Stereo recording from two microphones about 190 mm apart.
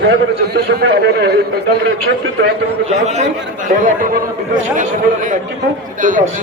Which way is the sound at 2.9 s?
35° right (ahead or behind).